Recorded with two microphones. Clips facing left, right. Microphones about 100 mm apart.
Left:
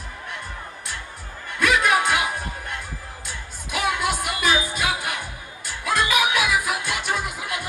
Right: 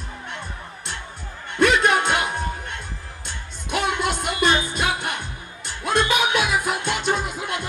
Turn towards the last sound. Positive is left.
turn(degrees=-25)  # may be behind; listen again after turning